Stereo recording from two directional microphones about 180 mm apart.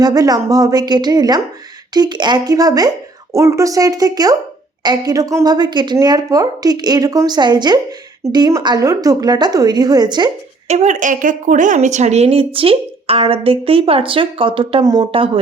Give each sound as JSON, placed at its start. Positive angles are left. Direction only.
{"t": 0.0, "sound": "a woman's voice", "side_deg": -20}
{"t": 10.7, "sound": "speech", "side_deg": -40}